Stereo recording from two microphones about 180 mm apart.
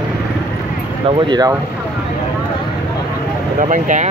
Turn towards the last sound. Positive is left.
turn(degrees=-45)  # may be behind; listen again after turning